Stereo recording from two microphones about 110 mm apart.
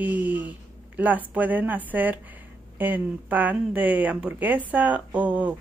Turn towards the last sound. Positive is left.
turn(degrees=-15)  # may be behind; listen again after turning